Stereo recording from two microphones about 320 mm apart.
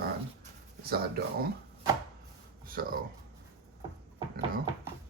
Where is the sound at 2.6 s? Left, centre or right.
Right.